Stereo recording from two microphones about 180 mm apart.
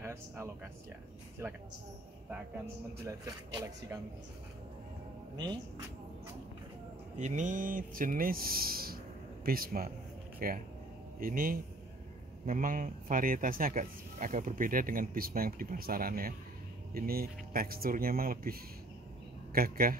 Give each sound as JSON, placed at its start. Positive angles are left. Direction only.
{"t": 0.0, "sound": "a sound", "side_deg": -15}
{"t": 1.4, "sound": "a man's voice", "side_deg": -15}
{"t": 3.1, "sound": "a man's voice", "side_deg": -20}
{"t": 7.2, "sound": "a man's voice", "side_deg": -45}